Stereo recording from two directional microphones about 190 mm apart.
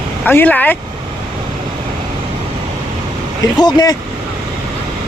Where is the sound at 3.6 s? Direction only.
20° left (ahead or behind).